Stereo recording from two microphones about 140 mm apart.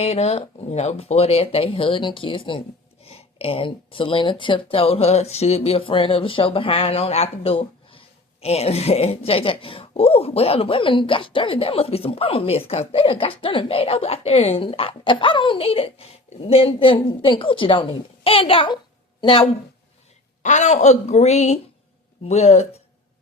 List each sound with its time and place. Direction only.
0.0 s speech: 50° left (ahead or behind)
20.4 s speech: 55° left (ahead or behind)